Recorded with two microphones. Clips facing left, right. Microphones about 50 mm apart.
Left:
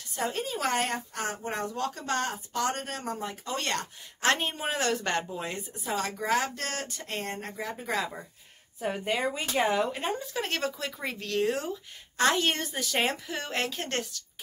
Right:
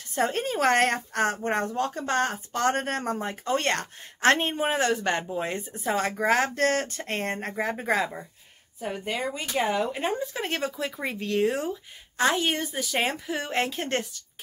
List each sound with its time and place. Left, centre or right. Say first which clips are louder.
0.1 s speech: right 5 dB; right
1.8 s speech: right 4 dB; right
8.7 s speech: left 1 dB; centre
10.1 s speech: right 3 dB; centre
13.1 s speech: right 4 dB; centre